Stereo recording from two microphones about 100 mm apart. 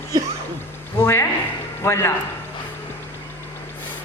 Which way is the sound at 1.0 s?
20° left (ahead or behind).